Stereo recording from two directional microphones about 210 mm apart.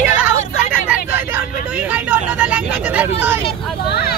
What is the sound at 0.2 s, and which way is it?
Vehicle, 5° right (ahead or behind).